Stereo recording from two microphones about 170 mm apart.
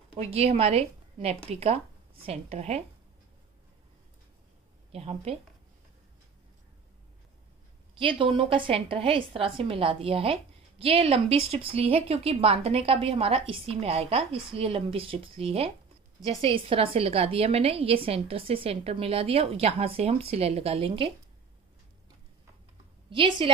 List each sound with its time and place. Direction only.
0.1 s a woman's voice: 35° right (ahead or behind)
4.9 s a woman's voice: 35° right (ahead or behind)
8.0 s a woman's voice: 30° right (ahead or behind)
23.0 s a woman's voice: 30° right (ahead or behind)